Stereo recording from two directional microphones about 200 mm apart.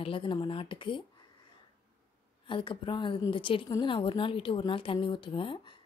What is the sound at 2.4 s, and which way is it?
A woman's voice, 25° left (ahead or behind).